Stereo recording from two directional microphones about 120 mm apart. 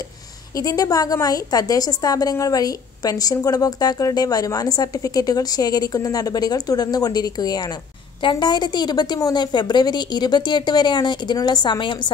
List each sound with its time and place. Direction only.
0.6 s a woman's voice: 30° left (ahead or behind)